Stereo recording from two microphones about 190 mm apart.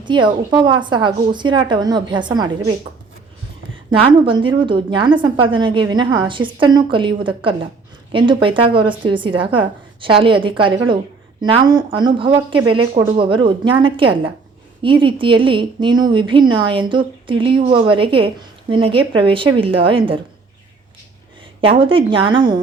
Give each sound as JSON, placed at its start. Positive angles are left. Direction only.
{"t": 0.0, "sound": "a woman's voice", "side_deg": -25}
{"t": 3.9, "sound": "a woman's voice", "side_deg": -25}
{"t": 21.6, "sound": "a woman's voice", "side_deg": -30}